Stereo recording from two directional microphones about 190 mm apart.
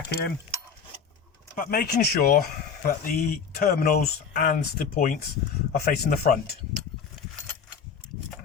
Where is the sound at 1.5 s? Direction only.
50° left (ahead or behind).